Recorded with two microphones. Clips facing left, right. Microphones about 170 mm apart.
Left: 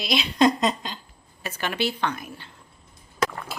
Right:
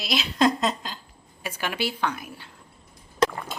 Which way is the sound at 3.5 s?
10° left (ahead or behind).